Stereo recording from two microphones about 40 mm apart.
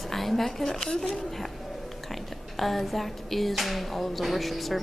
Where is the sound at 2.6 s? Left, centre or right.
Centre.